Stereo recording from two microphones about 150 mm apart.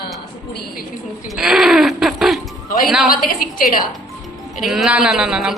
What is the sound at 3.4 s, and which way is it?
Speech, 70° left (ahead or behind).